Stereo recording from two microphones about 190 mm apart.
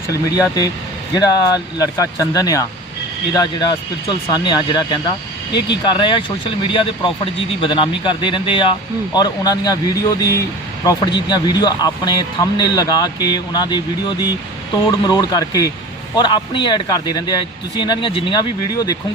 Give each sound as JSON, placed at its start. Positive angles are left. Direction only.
{"t": 0.1, "sound": "speech", "side_deg": 15}
{"t": 14.8, "sound": "speech", "side_deg": 20}